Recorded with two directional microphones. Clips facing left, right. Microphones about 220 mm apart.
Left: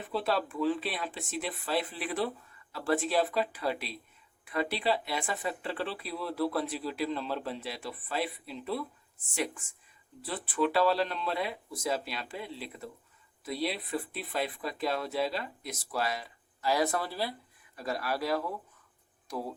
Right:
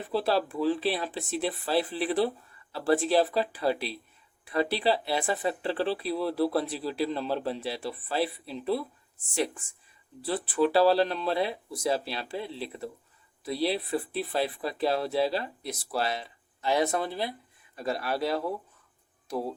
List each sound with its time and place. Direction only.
0.1 s speech: 35° right (ahead or behind)